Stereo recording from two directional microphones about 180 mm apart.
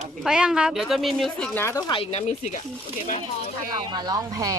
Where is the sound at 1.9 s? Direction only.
35° left (ahead or behind).